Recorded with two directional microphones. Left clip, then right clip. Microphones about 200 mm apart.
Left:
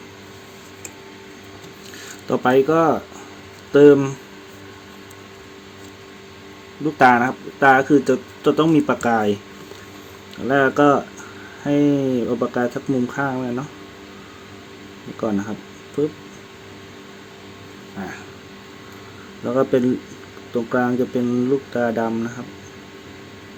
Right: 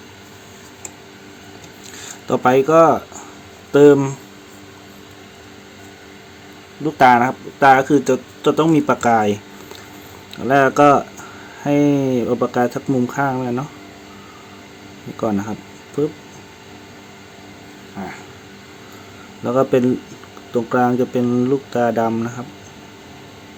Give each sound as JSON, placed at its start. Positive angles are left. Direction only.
{"t": 2.2, "sound": "speech", "side_deg": -15}
{"t": 6.8, "sound": "speech", "side_deg": -15}
{"t": 15.2, "sound": "speech", "side_deg": -20}
{"t": 19.5, "sound": "speech", "side_deg": -15}